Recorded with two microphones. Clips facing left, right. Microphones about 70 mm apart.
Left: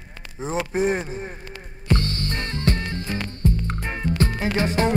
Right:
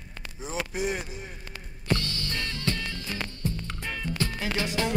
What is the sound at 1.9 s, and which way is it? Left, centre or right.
Music, left.